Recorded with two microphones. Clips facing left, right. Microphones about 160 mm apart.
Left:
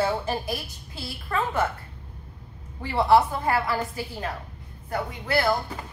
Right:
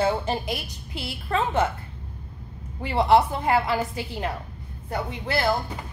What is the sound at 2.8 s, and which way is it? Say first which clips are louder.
Speech: even; 20° right (ahead or behind).